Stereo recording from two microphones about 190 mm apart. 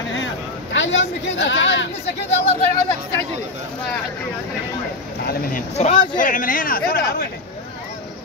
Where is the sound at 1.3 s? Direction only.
70° left (ahead or behind).